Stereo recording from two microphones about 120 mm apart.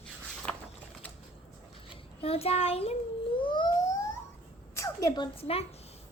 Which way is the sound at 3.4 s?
40° left (ahead or behind).